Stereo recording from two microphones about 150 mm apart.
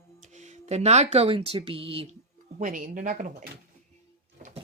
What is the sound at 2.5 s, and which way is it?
Speech, 60° right (ahead or behind).